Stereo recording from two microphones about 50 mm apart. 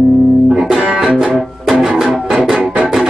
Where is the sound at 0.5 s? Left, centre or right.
Centre.